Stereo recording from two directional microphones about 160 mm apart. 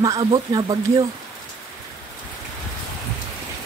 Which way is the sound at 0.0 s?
25° right (ahead or behind).